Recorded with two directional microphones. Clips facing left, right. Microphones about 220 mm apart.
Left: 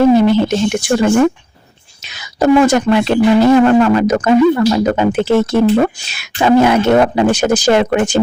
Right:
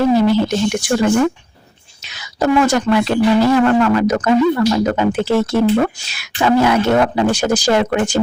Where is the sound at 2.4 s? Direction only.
20° left (ahead or behind).